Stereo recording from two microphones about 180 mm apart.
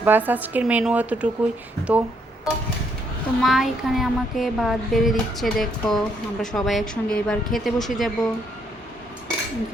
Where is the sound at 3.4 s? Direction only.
Centre (ahead or behind).